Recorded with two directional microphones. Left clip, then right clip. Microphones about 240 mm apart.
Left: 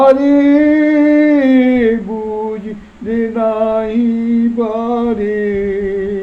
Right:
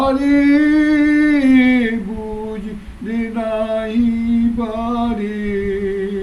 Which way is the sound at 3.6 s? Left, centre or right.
Centre.